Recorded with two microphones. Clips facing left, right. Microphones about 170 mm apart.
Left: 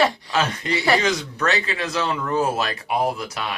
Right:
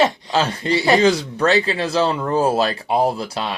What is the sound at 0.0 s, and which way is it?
Speech, 20° right (ahead or behind).